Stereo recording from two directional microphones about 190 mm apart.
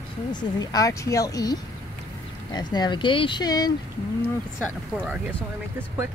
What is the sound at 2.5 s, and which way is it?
Speech, 20° left (ahead or behind).